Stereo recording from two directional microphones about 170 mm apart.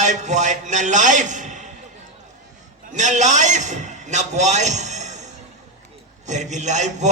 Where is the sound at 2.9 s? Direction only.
45° right (ahead or behind).